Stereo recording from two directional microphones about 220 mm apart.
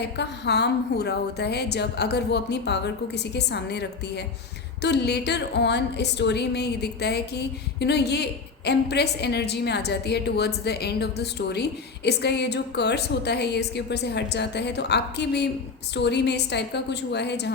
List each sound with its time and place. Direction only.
0.0 s speech: 50° left (ahead or behind)